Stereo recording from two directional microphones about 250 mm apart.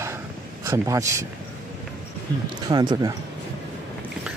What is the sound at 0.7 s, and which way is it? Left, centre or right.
Speech, centre.